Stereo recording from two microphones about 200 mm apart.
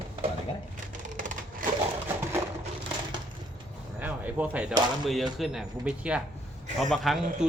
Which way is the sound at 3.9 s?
10° right (ahead or behind).